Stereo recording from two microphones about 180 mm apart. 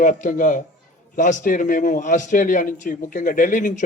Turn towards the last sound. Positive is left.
turn(degrees=45)  # may be behind; listen again after turning